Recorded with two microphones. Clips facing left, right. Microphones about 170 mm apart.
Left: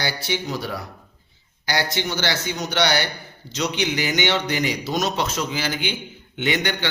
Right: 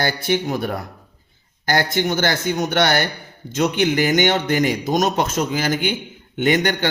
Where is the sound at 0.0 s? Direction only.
50° right (ahead or behind).